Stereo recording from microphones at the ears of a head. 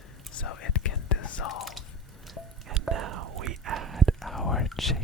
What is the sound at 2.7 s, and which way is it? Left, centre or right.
Whispering, right.